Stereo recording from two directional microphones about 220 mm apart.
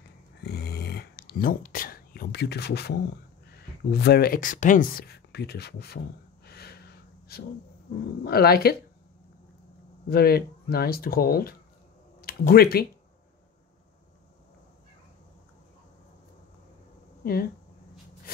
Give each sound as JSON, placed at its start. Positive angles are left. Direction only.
{"t": 0.4, "sound": "a sound", "side_deg": 45}
{"t": 3.5, "sound": "speech", "side_deg": 45}
{"t": 6.4, "sound": "gasp", "side_deg": 45}
{"t": 8.2, "sound": "speech", "side_deg": 45}
{"t": 10.0, "sound": "speech", "side_deg": 45}
{"t": 17.2, "sound": "a sound", "side_deg": 45}